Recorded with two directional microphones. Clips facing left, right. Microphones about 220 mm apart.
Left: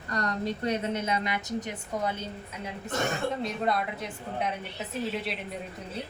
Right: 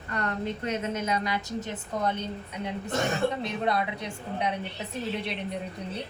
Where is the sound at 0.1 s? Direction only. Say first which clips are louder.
Even; 35° left (ahead or behind); by 2.7 s 5° left (ahead or behind).